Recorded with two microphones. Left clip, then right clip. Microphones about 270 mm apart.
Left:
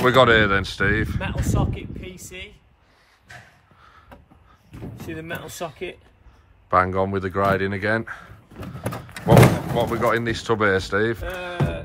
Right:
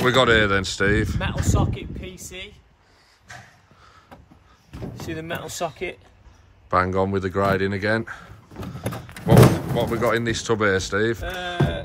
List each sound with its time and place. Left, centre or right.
0.0 s speech: centre
3.3 s snort: right
3.8 s a sound: centre
4.6 s speech: centre